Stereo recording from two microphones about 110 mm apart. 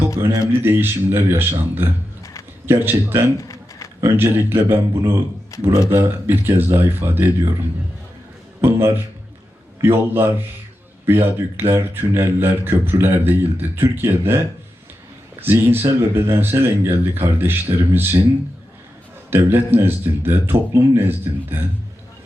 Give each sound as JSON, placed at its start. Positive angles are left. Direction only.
{"t": 0.2, "sound": "speech", "side_deg": -20}
{"t": 3.3, "sound": "a sound", "side_deg": 30}
{"t": 4.0, "sound": "speech", "side_deg": -20}
{"t": 5.5, "sound": "speech", "side_deg": 30}
{"t": 5.9, "sound": "speech", "side_deg": -20}
{"t": 8.6, "sound": "speech", "side_deg": -20}
{"t": 19.3, "sound": "speech", "side_deg": -20}